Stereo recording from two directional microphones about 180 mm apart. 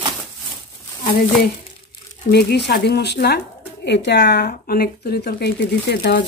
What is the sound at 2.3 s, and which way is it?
Speech, 65° left (ahead or behind).